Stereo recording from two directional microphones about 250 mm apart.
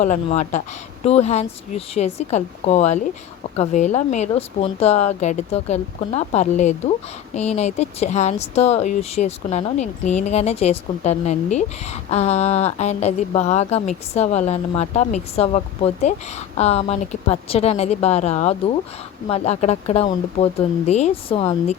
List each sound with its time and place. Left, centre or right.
0.0 s speech: left